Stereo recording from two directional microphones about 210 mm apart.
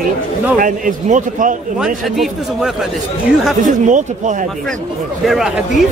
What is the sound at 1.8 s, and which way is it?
Speech, centre (ahead or behind).